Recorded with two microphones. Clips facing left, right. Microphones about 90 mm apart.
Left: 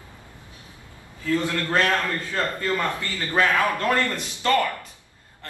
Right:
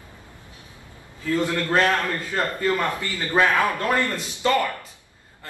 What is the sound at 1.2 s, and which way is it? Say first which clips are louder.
A man's voice: right 1 dB; 20° right (ahead or behind).